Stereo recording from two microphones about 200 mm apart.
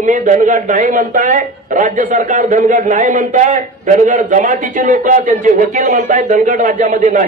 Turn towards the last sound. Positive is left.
turn(degrees=-40)  # may be behind; listen again after turning